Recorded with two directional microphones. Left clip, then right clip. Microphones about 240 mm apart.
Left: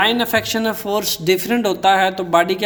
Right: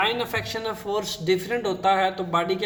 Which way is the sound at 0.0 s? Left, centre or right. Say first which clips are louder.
Left 8 dB; left.